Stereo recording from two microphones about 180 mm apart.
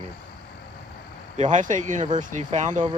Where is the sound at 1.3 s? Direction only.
40° right (ahead or behind).